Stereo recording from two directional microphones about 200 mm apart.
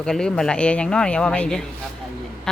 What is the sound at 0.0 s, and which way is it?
A woman's voice, 5° left (ahead or behind).